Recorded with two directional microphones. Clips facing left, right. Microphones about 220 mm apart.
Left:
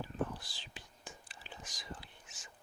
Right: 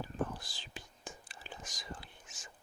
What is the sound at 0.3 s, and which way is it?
Whispering, 45° right (ahead or behind).